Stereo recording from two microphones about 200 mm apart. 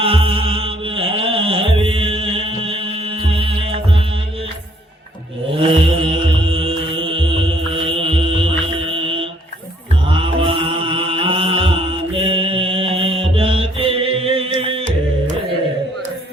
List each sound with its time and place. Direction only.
0.0 s music: 25° right (ahead or behind)
5.6 s mantra: 25° right (ahead or behind)